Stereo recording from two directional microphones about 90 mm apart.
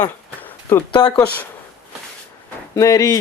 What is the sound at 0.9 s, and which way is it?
Speech, 60° left (ahead or behind).